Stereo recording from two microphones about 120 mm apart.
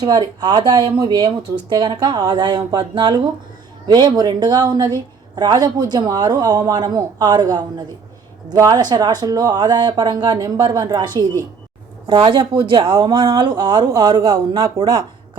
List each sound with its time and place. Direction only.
0.0 s a woman's voice: 35° right (ahead or behind)
12.3 s a woman's voice: 40° right (ahead or behind)